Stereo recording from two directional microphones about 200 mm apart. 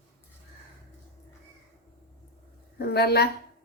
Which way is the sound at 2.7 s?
55° left (ahead or behind).